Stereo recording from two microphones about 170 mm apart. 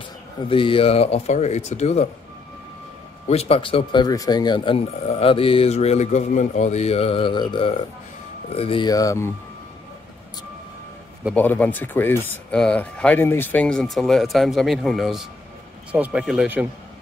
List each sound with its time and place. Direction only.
0.5 s speech: 30° left (ahead or behind)
3.3 s speech: 35° left (ahead or behind); by 9.3 s 20° left (ahead or behind)
11.3 s speech: 10° left (ahead or behind)